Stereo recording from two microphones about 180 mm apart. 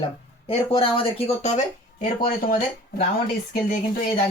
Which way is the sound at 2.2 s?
50° left (ahead or behind).